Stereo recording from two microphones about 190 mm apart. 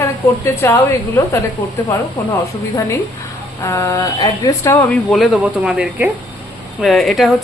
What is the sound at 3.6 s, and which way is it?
A woman's voice, 15° left (ahead or behind).